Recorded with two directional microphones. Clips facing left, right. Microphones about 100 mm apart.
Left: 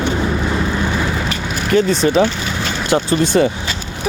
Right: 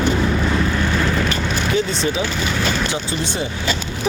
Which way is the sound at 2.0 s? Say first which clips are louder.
Left 7 dB; 45° left (ahead or behind).